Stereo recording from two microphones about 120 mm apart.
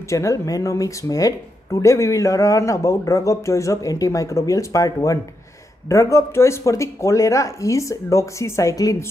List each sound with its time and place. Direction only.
0.1 s speech: 25° left (ahead or behind)